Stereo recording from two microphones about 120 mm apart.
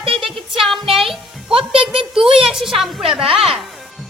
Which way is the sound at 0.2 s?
Centre (ahead or behind).